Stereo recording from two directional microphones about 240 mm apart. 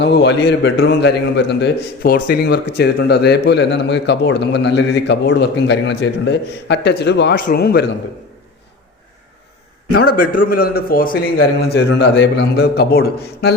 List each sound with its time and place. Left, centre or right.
0.0 s a man's voice: left
9.9 s a man's voice: left